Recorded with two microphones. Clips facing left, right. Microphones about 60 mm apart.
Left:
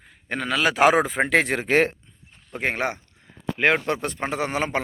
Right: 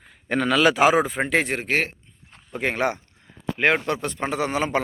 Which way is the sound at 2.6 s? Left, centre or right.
Left.